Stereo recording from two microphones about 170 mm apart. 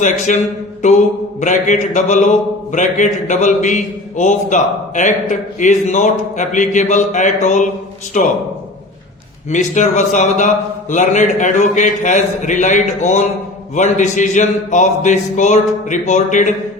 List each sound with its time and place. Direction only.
0.0 s mantra: 45° left (ahead or behind)
9.5 s mantra: 45° left (ahead or behind)